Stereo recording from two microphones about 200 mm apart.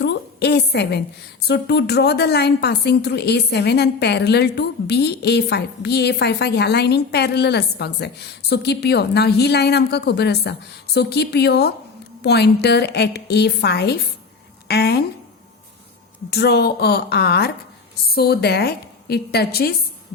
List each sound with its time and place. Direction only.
0.0 s a woman's voice: 60° left (ahead or behind)
16.3 s a woman's voice: 55° left (ahead or behind)